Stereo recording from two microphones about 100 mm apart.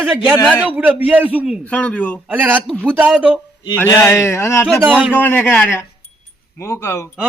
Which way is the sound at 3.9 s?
30° left (ahead or behind).